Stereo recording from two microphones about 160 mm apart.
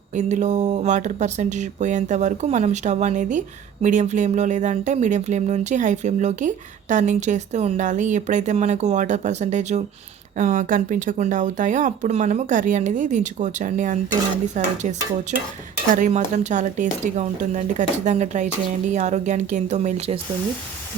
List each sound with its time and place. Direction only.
0.2 s speech: 45° right (ahead or behind)